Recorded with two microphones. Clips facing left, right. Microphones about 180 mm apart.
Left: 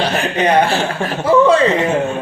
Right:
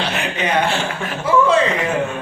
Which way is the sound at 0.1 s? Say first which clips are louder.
Left 6 dB; 35° left (ahead or behind).